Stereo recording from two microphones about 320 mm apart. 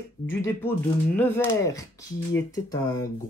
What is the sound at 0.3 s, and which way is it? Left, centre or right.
Speech, centre.